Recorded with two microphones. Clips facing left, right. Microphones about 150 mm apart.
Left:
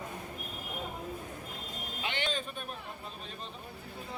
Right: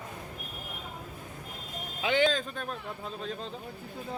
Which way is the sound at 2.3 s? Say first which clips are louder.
Right 5 dB; 90° right.